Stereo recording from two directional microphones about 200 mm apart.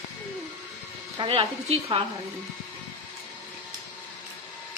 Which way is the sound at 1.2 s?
30° right (ahead or behind).